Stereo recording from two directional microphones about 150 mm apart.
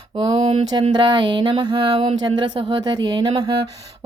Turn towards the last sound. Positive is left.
turn(degrees=-30)  # may be behind; listen again after turning